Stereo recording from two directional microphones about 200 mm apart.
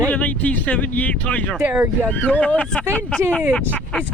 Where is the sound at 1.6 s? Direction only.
10° right (ahead or behind).